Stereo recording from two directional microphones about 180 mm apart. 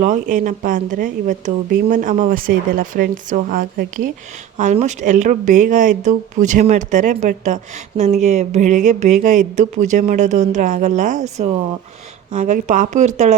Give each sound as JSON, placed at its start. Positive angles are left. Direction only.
{"t": 0.0, "sound": "speech", "side_deg": -45}
{"t": 4.5, "sound": "speech", "side_deg": -40}